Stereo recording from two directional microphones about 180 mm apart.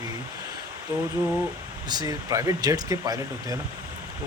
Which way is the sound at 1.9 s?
20° right (ahead or behind).